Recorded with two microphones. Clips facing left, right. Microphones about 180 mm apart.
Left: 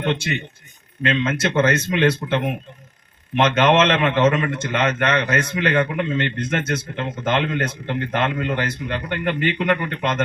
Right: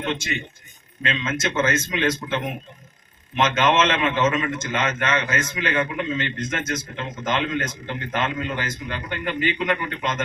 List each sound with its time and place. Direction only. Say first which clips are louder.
0.0 s a man's voice: left 4 dB; 60° left (ahead or behind)